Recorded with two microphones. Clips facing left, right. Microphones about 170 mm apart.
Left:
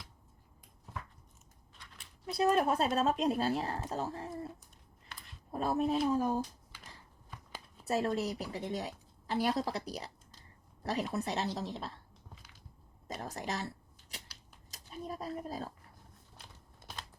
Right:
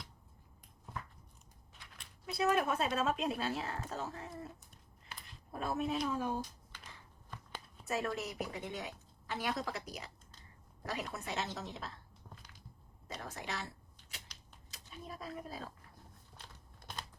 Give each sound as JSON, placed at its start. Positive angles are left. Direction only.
{"t": 2.2, "sound": "speech", "side_deg": 35}
{"t": 5.5, "sound": "speech", "side_deg": 35}
{"t": 8.1, "sound": "speech", "side_deg": 35}
{"t": 13.1, "sound": "speech", "side_deg": 40}
{"t": 14.7, "sound": "speech", "side_deg": 40}